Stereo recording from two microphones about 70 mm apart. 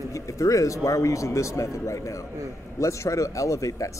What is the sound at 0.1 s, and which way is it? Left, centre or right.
A man's voice, left.